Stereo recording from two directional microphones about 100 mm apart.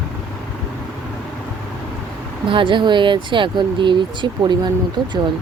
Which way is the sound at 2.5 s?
55° right (ahead or behind).